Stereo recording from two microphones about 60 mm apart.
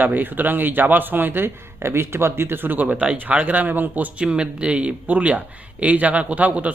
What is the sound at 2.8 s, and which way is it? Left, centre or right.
A man's voice, right.